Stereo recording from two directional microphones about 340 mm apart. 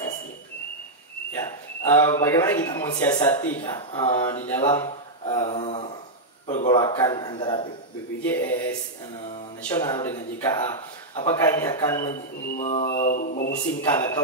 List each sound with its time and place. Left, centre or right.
1.4 s a man's voice: centre
12.5 s speech: left
13.7 s a man's voice: centre